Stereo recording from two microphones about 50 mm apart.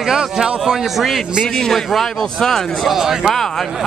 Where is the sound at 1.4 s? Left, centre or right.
Centre.